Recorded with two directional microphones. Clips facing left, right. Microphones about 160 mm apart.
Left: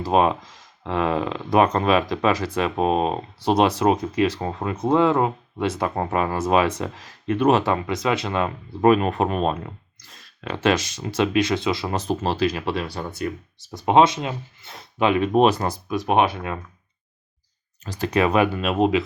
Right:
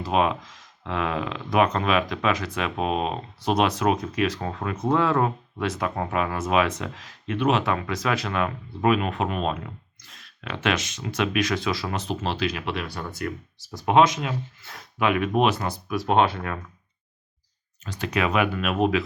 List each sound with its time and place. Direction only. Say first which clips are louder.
0.0 s speech: left 4 dB; 35° left (ahead or behind)
7.7 s speech: left 3 dB; 25° left (ahead or behind)
8.8 s speech: left 5 dB; 40° left (ahead or behind)
11.9 s speech: left 5 dB; 40° left (ahead or behind)
15.9 s speech: left 1 dB; 15° left (ahead or behind)
17.8 s speech: left 5 dB; 35° left (ahead or behind)